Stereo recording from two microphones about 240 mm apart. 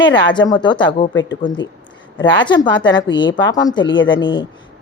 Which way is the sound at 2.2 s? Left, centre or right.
Centre.